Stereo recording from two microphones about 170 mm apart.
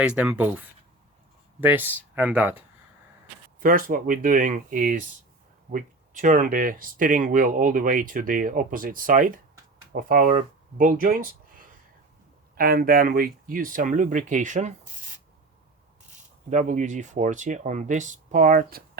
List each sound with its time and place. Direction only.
0.0 s speech: 5° right (ahead or behind)
1.6 s speech: 10° right (ahead or behind)
3.6 s speech: 55° right (ahead or behind)
16.5 s speech: 45° right (ahead or behind)